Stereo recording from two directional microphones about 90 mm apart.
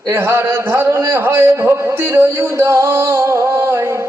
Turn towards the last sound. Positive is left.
turn(degrees=-30)  # may be behind; listen again after turning